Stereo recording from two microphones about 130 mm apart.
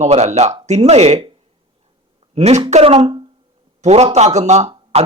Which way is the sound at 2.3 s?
60° right (ahead or behind).